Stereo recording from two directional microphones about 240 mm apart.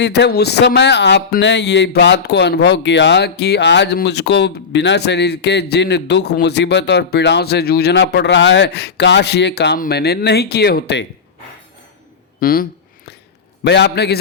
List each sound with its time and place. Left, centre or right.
0.0 s speech: left
12.4 s speech: left
13.7 s speech: left